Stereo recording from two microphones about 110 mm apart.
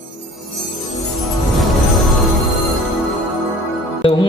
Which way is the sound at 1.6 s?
Centre (ahead or behind).